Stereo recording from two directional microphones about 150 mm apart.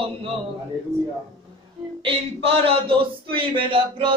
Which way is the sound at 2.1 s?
40° right (ahead or behind).